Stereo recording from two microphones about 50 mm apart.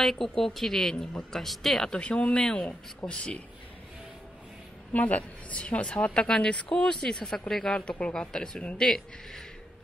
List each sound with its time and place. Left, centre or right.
0.0 s speech: centre
2.0 s a woman's voice: left
4.9 s a woman's voice: left; by 9.4 s centre